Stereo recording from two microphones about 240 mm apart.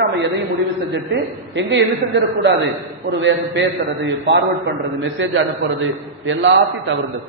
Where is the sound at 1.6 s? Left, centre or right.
Right.